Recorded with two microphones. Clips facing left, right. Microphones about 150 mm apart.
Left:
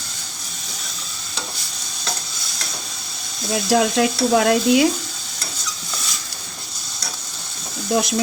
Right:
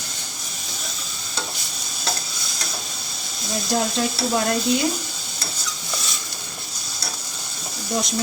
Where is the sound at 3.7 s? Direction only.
70° left (ahead or behind).